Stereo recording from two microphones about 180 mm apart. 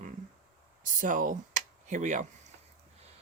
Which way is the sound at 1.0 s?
50° right (ahead or behind).